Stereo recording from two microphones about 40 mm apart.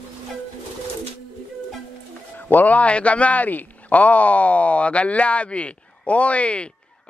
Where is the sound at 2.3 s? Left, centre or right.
Left.